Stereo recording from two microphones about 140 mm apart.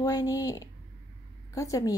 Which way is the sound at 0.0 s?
25° left (ahead or behind).